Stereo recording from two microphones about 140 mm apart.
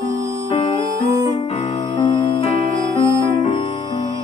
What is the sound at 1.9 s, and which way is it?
Music, 30° left (ahead or behind).